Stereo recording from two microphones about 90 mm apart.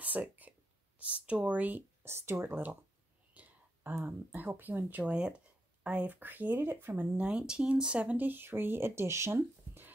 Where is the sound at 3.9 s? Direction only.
25° right (ahead or behind).